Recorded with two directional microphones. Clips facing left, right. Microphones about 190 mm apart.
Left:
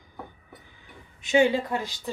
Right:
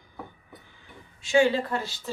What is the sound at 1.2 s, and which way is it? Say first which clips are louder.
Speech: even; 20° left (ahead or behind).